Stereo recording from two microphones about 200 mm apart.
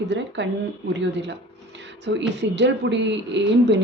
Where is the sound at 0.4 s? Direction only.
65° right (ahead or behind).